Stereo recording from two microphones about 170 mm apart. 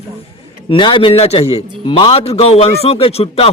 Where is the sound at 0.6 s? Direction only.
30° left (ahead or behind).